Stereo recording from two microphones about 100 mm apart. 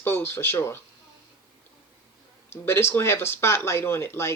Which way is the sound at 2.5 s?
25° left (ahead or behind).